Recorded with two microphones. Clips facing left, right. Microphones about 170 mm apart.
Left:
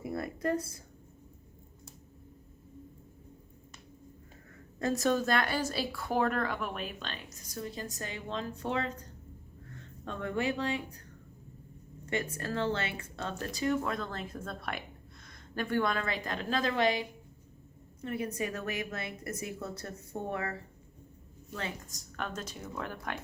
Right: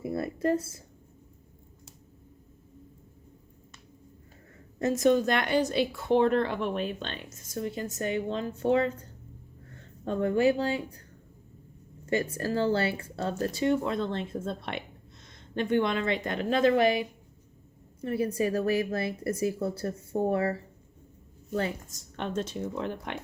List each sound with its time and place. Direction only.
0.0 s a sound: 25° right (ahead or behind)
4.8 s a woman's voice: 20° right (ahead or behind)
12.0 s speech: 30° right (ahead or behind)
18.0 s a woman's voice: 30° right (ahead or behind)